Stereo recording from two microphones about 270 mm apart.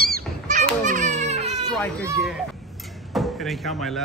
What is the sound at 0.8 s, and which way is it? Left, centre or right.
Baby cry, right.